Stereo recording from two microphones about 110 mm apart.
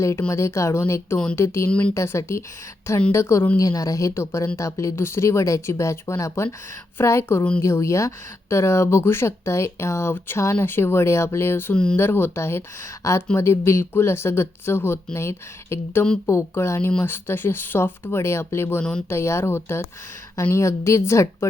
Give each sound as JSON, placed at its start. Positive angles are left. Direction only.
{"t": 0.0, "sound": "speech", "side_deg": 25}
{"t": 18.8, "sound": "speech", "side_deg": 10}
{"t": 19.0, "sound": "speech", "side_deg": 25}